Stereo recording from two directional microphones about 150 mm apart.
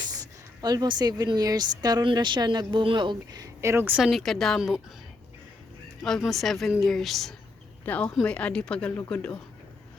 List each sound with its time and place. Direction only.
0.6 s a woman's voice: 25° right (ahead or behind)
4.0 s a woman's voice: centre (ahead or behind)
6.0 s a woman's voice: 5° left (ahead or behind)